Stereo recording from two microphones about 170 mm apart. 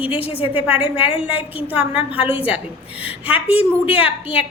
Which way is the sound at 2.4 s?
10° right (ahead or behind).